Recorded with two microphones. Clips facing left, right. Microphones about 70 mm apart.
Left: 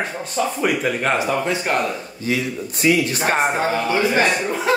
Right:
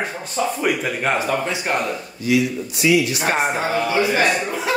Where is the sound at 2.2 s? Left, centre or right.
Left.